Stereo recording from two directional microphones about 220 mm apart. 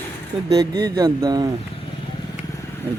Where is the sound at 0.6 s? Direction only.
15° right (ahead or behind).